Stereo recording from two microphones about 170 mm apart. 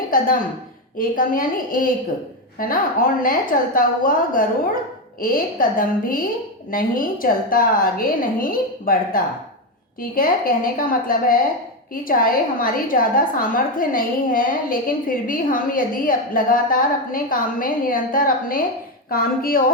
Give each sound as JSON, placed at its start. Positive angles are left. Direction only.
{"t": 0.1, "sound": "a woman's voice", "side_deg": 55}